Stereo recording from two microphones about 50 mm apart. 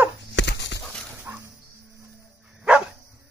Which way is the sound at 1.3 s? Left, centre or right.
Right.